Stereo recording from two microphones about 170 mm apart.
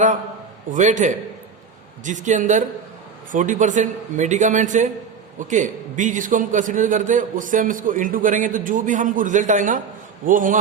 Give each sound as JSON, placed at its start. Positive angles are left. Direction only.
{"t": 0.7, "sound": "a man's voice", "side_deg": -45}